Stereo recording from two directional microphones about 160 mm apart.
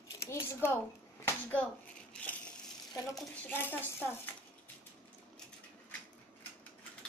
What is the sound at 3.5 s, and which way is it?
Speech, 15° left (ahead or behind).